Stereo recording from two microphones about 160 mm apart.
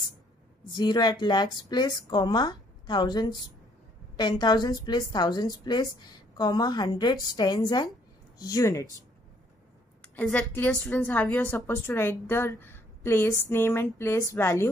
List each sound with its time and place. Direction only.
0.7 s a woman's voice: 25° left (ahead or behind)
10.0 s a woman's voice: 10° left (ahead or behind)